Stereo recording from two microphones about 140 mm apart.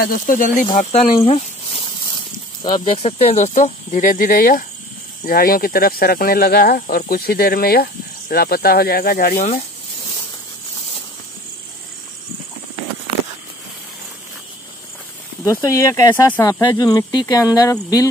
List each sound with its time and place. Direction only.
0.0 s speech: 80° left
0.7 s speech: 50° left (ahead or behind)
2.6 s speech: 35° left (ahead or behind); by 9.6 s 75° left (ahead or behind)
15.4 s speech: 25° left (ahead or behind)